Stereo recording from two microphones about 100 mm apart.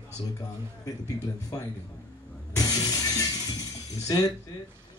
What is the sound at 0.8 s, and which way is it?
Speech, 35° left (ahead or behind).